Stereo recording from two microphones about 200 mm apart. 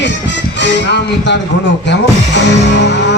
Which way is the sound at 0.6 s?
60° left (ahead or behind).